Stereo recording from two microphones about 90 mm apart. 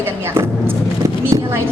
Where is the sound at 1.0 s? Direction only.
35° right (ahead or behind).